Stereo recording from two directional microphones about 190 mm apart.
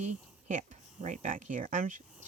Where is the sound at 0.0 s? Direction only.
40° right (ahead or behind).